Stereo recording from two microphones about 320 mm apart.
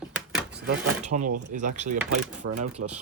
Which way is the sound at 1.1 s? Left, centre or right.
Right.